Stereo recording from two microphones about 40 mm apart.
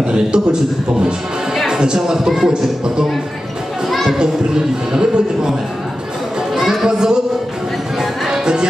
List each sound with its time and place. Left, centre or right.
0.1 s speech: right
1.7 s speech: centre
3.9 s a child's voice: centre
4.2 s speech: centre
6.5 s music: centre
6.9 s speech: centre
8.0 s music: centre